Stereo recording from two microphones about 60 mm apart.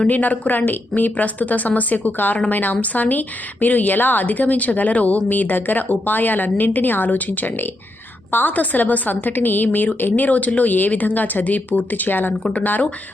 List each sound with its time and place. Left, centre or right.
0.1 s a woman's voice: left
12.4 s speech: centre
12.6 s a woman's voice: left